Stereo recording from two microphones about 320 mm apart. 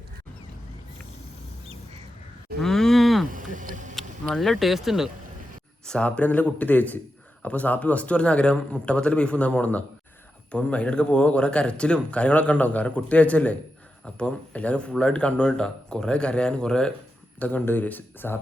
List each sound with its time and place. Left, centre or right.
2.6 s cattle: centre
3.3 s a sound: right
3.9 s speech: centre